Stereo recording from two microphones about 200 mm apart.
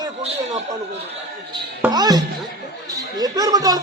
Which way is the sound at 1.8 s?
20° right (ahead or behind).